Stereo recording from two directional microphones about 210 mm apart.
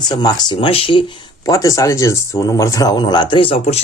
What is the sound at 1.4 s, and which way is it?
Speech, 15° left (ahead or behind).